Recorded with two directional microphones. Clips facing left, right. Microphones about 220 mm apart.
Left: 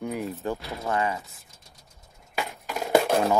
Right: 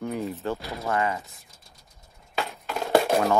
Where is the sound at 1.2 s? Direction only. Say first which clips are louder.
Even; centre (ahead or behind).